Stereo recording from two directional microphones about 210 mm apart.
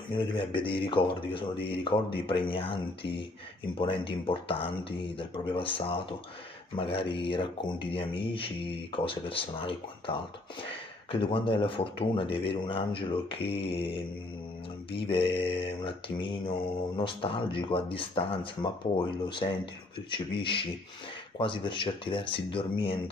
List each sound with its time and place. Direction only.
0.1 s mantra: 25° left (ahead or behind)